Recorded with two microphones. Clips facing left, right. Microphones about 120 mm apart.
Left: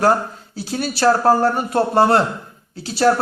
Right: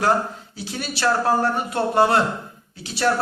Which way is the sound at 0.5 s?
40° left (ahead or behind).